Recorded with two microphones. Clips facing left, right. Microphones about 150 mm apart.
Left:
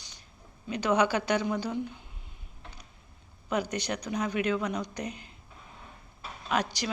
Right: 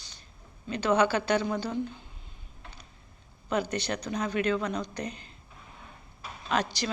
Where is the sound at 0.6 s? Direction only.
15° left (ahead or behind).